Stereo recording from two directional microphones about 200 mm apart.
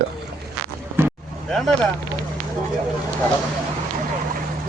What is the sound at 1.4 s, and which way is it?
Speech, centre (ahead or behind).